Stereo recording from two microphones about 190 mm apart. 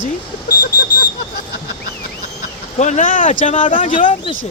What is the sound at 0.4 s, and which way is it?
Alarm, 55° left (ahead or behind).